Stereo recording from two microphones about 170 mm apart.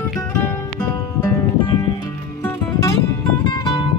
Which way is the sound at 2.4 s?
20° left (ahead or behind).